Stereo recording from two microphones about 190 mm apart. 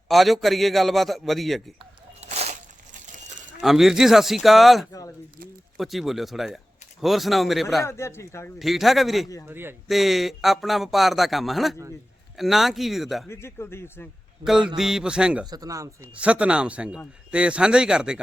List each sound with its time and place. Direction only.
0.1 s a man's voice: centre (ahead or behind)
1.8 s a sound: 35° right (ahead or behind)
3.6 s a man's voice: centre (ahead or behind)
4.9 s speech: 20° left (ahead or behind)
5.7 s a man's voice: centre (ahead or behind)
7.9 s speech: 15° left (ahead or behind)
8.5 s a man's voice: centre (ahead or behind)
9.5 s speech: 10° right (ahead or behind)
9.9 s a man's voice: centre (ahead or behind)
13.2 s speech: 15° left (ahead or behind)
14.4 s a man's voice: centre (ahead or behind)
15.4 s speech: 20° right (ahead or behind)
16.1 s a man's voice: 5° right (ahead or behind)